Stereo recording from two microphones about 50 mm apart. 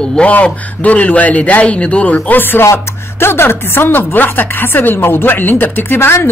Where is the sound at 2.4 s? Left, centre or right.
Left.